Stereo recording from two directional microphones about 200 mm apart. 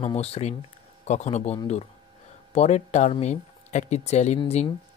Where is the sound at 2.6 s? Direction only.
35° left (ahead or behind).